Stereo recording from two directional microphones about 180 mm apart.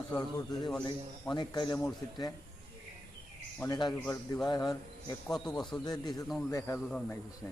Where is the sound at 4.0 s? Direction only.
10° left (ahead or behind).